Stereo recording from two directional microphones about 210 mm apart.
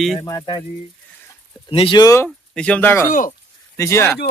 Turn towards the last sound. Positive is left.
turn(degrees=10)  # may be behind; listen again after turning